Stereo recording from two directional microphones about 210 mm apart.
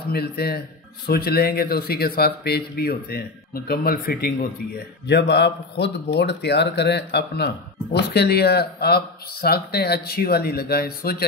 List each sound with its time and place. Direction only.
0.1 s speech: 50° left (ahead or behind)